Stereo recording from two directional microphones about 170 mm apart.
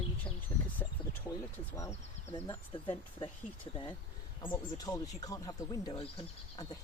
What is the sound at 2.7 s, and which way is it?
Speech, 30° left (ahead or behind).